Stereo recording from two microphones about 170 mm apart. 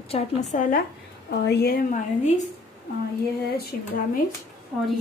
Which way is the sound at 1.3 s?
75° left (ahead or behind).